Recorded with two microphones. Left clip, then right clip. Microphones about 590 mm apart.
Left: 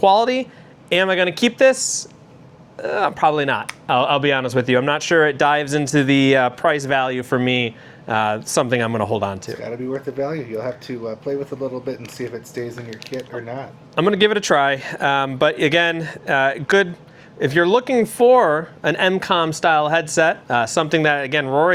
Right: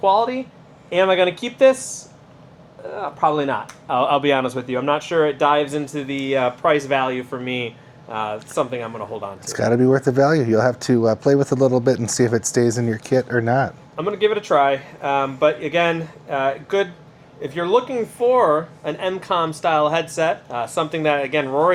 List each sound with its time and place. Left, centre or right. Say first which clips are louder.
0.0 s speech: left 3 dB; left
2.8 s speech: left 3 dB; left
9.6 s speech: right 10 dB; right
13.9 s a man's voice: left 5 dB; left